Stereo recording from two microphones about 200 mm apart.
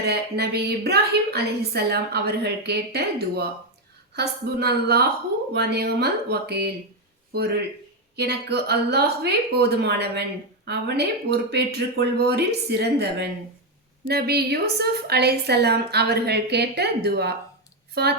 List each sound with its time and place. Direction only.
0.0 s a woman's voice: 55° right (ahead or behind)